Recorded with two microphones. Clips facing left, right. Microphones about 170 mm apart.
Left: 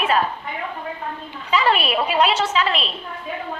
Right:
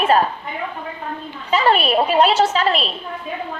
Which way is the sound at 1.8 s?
40° right (ahead or behind).